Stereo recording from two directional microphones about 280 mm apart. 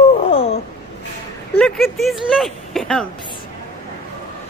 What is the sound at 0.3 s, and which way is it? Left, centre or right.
Wail, left.